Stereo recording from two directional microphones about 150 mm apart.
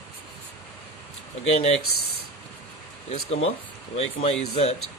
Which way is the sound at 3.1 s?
45° left (ahead or behind).